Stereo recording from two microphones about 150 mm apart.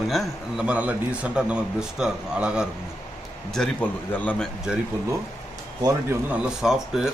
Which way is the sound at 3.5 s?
5° left (ahead or behind).